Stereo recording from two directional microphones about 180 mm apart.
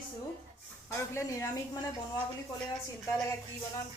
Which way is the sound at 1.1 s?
15° left (ahead or behind).